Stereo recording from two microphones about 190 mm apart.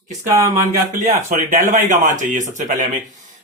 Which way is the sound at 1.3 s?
45° right (ahead or behind).